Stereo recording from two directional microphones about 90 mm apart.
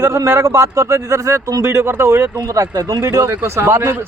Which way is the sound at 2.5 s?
35° right (ahead or behind).